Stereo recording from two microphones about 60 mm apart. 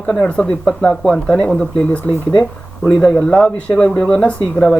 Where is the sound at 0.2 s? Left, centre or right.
Centre.